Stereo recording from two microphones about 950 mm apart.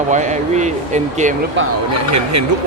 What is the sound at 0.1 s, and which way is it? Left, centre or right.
Speech, centre.